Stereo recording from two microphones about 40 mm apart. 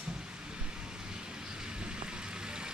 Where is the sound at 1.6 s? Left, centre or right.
Right.